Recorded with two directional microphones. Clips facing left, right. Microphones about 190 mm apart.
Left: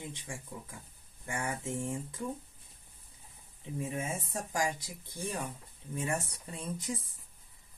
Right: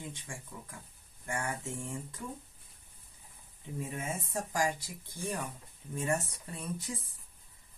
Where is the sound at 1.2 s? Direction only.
20° left (ahead or behind).